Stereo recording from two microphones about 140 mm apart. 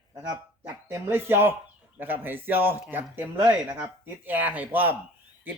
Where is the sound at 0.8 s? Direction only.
15° right (ahead or behind).